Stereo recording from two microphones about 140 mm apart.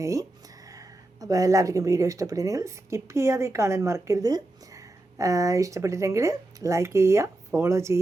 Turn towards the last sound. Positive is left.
turn(degrees=-20)  # may be behind; listen again after turning